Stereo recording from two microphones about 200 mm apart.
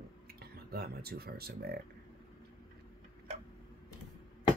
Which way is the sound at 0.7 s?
50° right (ahead or behind).